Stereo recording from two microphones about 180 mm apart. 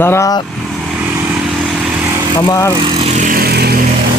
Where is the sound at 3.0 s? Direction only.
45° right (ahead or behind).